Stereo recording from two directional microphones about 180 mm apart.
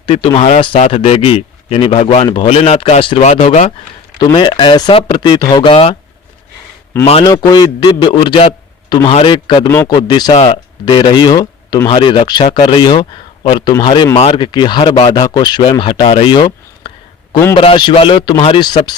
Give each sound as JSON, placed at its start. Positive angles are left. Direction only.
{"t": 0.0, "sound": "speech", "side_deg": 30}
{"t": 4.2, "sound": "speech", "side_deg": 25}
{"t": 7.0, "sound": "speech", "side_deg": 30}
{"t": 9.6, "sound": "speech", "side_deg": 15}
{"t": 14.2, "sound": "speech", "side_deg": 35}
{"t": 14.4, "sound": "speech", "side_deg": 25}